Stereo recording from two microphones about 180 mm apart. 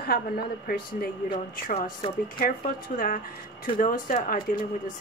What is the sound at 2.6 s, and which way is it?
A woman's voice, 50° left (ahead or behind).